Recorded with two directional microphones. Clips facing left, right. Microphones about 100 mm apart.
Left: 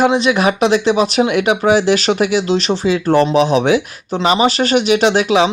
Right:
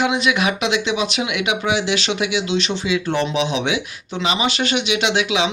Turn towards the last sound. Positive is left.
turn(degrees=40)  # may be behind; listen again after turning